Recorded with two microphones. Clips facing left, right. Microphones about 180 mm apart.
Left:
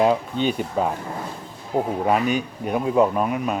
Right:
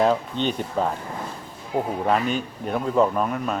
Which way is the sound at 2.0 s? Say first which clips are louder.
Left 2 dB; 10° left (ahead or behind).